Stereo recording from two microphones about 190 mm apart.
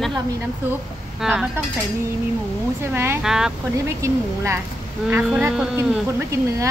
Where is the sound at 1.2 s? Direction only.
Centre (ahead or behind).